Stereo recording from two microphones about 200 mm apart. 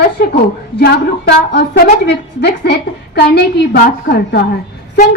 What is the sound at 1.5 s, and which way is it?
A woman's voice, 55° left (ahead or behind).